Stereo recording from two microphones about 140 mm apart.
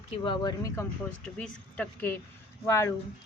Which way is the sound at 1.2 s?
10° left (ahead or behind).